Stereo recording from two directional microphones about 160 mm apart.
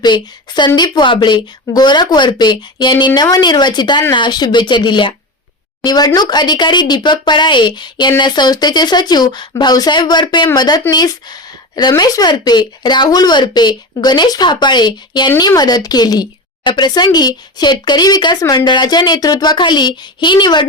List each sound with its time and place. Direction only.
0.0 s a woman's voice: 30° left (ahead or behind)